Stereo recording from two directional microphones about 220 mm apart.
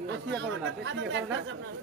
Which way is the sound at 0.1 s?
55° right (ahead or behind).